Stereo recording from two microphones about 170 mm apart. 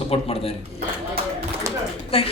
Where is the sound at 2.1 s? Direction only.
35° left (ahead or behind).